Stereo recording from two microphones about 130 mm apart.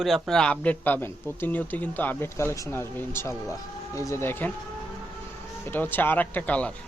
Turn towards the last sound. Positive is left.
turn(degrees=10)  # may be behind; listen again after turning